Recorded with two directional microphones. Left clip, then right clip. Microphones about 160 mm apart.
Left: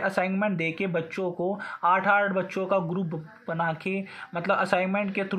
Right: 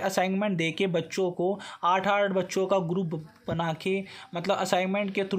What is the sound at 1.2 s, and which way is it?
Speech, 20° right (ahead or behind).